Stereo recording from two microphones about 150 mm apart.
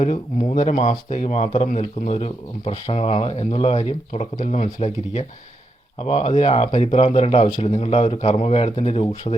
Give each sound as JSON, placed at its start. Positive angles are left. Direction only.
{"t": 0.0, "sound": "speech", "side_deg": 45}